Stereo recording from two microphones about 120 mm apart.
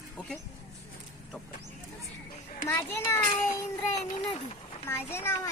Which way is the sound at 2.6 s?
20° left (ahead or behind).